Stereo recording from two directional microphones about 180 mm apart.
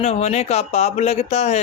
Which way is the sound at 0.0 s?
35° left (ahead or behind).